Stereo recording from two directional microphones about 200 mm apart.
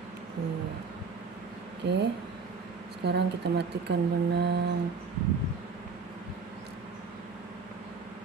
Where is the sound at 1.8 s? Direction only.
60° right (ahead or behind).